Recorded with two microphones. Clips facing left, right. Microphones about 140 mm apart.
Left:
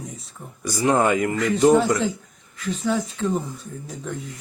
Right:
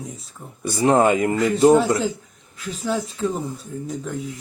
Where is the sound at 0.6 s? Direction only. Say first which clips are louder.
Right 3 dB; 25° right (ahead or behind).